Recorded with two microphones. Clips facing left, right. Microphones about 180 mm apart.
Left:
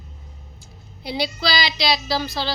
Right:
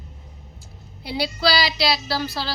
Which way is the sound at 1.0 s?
5° right (ahead or behind).